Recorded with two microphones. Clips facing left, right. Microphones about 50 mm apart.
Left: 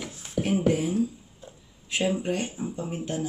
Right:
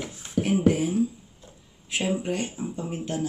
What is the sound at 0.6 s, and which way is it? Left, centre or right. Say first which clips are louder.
Beatboxing: right 2 dB; centre.